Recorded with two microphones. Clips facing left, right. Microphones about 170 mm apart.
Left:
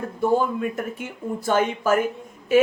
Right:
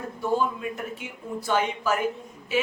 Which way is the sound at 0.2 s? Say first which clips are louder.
Left 5 dB; 50° left (ahead or behind).